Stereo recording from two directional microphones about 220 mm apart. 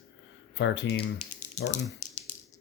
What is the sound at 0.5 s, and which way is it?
Speech, 55° left (ahead or behind).